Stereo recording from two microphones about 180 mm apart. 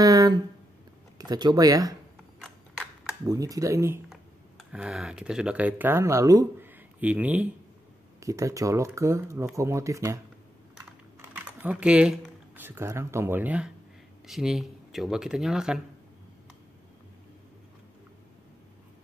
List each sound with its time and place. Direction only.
0.0 s a sound: 20° right (ahead or behind)
1.1 s speech: 20° right (ahead or behind)
3.3 s speech: 20° right (ahead or behind)
4.1 s speech: 5° right (ahead or behind)
11.1 s speech: 10° right (ahead or behind)